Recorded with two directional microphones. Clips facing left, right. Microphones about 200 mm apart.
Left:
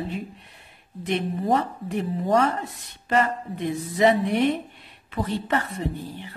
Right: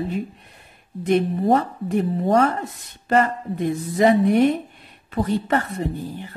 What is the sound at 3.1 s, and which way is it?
Speech, 45° right (ahead or behind).